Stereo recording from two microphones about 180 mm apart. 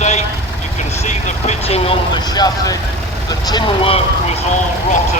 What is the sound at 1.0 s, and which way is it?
Vehicle, 35° left (ahead or behind).